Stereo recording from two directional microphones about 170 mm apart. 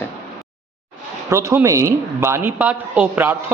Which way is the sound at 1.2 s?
15° right (ahead or behind).